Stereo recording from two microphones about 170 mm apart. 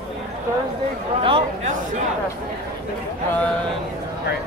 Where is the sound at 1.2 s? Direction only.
30° right (ahead or behind).